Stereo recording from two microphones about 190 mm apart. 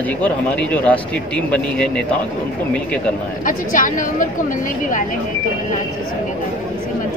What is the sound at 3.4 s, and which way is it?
A woman's voice, 45° left (ahead or behind).